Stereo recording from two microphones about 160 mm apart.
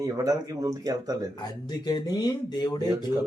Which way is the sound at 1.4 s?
25° left (ahead or behind).